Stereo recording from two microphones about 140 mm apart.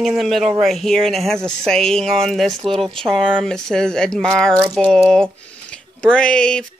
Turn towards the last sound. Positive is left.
turn(degrees=5)  # may be behind; listen again after turning